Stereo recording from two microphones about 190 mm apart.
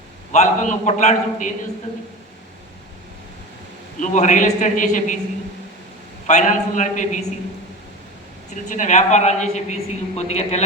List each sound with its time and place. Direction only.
0.3 s a man's voice: 40° left (ahead or behind)
4.0 s a man's voice: 40° left (ahead or behind)
6.2 s a man's voice: 40° left (ahead or behind)
8.7 s a man's voice: 40° left (ahead or behind)